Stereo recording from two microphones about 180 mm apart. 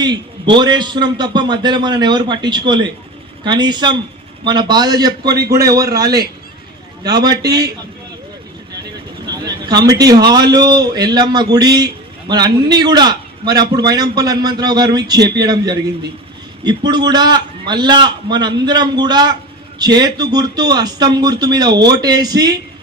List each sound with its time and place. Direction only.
0.0 s a man's voice: 25° right (ahead or behind)
9.2 s a sound: 20° right (ahead or behind)
10.2 s a man's voice: 20° right (ahead or behind)